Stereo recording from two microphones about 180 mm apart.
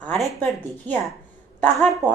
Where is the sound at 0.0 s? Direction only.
5° left (ahead or behind).